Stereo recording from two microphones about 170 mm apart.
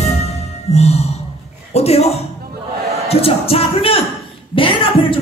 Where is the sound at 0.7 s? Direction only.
40° left (ahead or behind).